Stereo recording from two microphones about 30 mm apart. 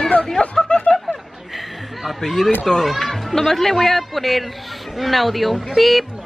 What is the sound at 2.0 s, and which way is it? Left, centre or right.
Speech, centre.